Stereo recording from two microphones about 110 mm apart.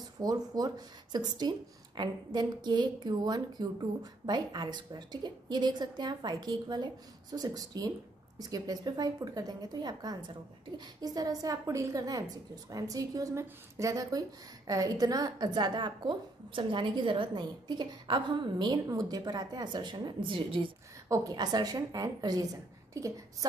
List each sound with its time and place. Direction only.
0.2 s a woman's voice: 35° right (ahead or behind)
21.1 s a woman's voice: 30° right (ahead or behind)